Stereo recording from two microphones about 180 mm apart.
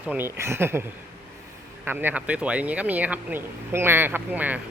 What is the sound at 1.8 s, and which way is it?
Speech, 10° right (ahead or behind).